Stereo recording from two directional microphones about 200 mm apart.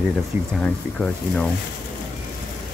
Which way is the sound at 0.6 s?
5° left (ahead or behind).